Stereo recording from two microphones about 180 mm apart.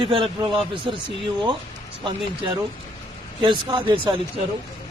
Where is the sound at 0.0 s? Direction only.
30° right (ahead or behind).